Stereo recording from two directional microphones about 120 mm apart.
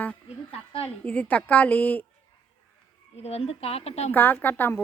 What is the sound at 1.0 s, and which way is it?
A woman's voice, 15° left (ahead or behind).